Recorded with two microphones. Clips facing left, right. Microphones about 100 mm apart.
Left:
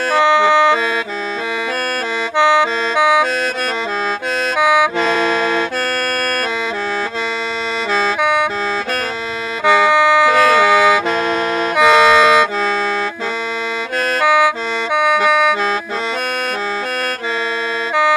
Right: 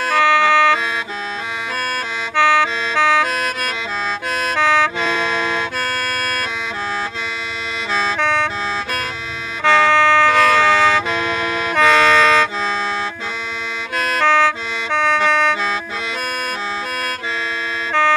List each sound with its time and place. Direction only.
0.1 s music: 20° left (ahead or behind)
2.3 s music: 20° left (ahead or behind)
4.6 s music: 10° left (ahead or behind)
5.0 s music: 50° left (ahead or behind)
8.2 s music: 10° left (ahead or behind)
9.7 s music: 10° left (ahead or behind)
14.2 s music: 10° left (ahead or behind)